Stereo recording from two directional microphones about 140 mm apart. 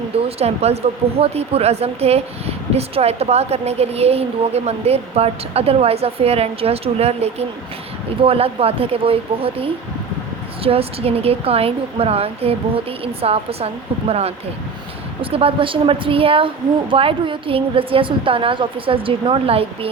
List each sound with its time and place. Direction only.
0.3 s a woman's voice: 50° right (ahead or behind)